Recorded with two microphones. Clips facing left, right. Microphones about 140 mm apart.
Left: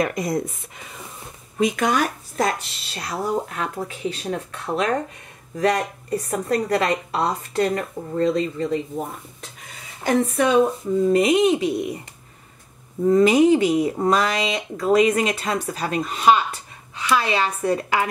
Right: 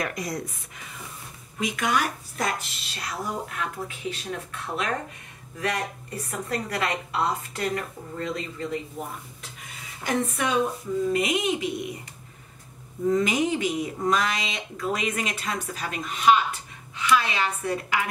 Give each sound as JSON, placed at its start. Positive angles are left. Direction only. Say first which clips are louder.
{"t": 0.0, "sound": "speech", "louder": "left 8 dB", "side_deg": 25}
{"t": 1.6, "sound": "a woman's voice", "louder": "left 6 dB", "side_deg": 35}
{"t": 10.0, "sound": "a woman's voice", "louder": "left 7 dB", "side_deg": 35}
{"t": 13.1, "sound": "a woman's voice", "louder": "left 10 dB", "side_deg": 35}